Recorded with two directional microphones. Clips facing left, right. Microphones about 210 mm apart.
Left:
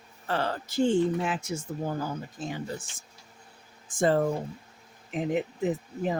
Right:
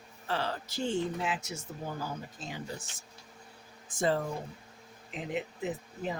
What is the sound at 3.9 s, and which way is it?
Speech, 50° left (ahead or behind).